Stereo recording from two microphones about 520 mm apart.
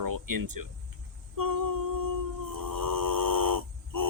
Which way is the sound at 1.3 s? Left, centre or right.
Right.